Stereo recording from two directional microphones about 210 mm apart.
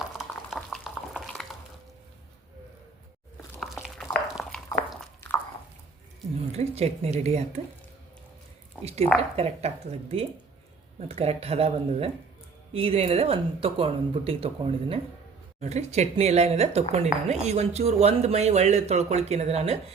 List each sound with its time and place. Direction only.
0.2 s boiling: centre (ahead or behind)
3.8 s a sound: centre (ahead or behind)
6.6 s speech: 30° right (ahead or behind)
8.8 s speech: 30° right (ahead or behind)